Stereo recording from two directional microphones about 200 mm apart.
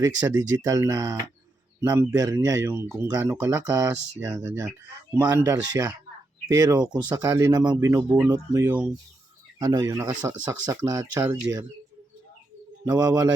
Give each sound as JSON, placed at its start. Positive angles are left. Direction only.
{"t": 0.0, "sound": "speech", "side_deg": -20}
{"t": 12.8, "sound": "speech", "side_deg": -20}